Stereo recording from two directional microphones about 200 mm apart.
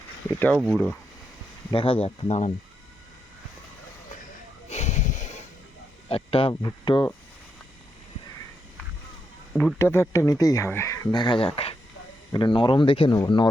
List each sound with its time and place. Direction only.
0.5 s speech: centre (ahead or behind)
1.7 s speech: 25° left (ahead or behind)
4.7 s a sound: 35° left (ahead or behind)
6.1 s speech: 30° left (ahead or behind)
9.5 s speech: 5° left (ahead or behind)